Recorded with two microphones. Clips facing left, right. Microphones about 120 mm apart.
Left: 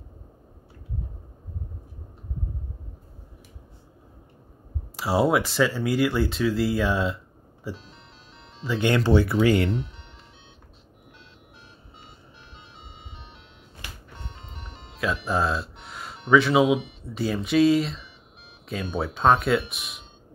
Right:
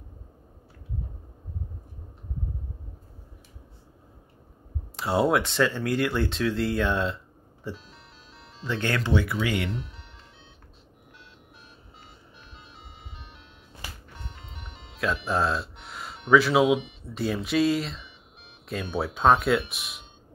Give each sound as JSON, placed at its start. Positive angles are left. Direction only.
{"t": 4.9, "sound": "speech", "side_deg": 0}
{"t": 9.0, "sound": "speech", "side_deg": 35}
{"t": 14.4, "sound": "music", "side_deg": 0}
{"t": 14.8, "sound": "speech", "side_deg": 0}